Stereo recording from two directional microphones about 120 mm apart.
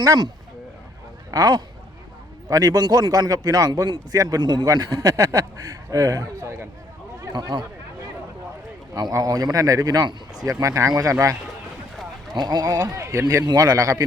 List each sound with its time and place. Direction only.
0.0 s a man's voice: 30° right (ahead or behind)
1.3 s a man's voice: 30° right (ahead or behind)
7.3 s a man's voice: 35° right (ahead or behind)
8.9 s speech: 30° right (ahead or behind)
12.4 s a man's voice: 35° right (ahead or behind)